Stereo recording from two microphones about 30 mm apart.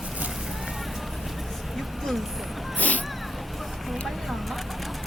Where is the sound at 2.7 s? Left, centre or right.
Left.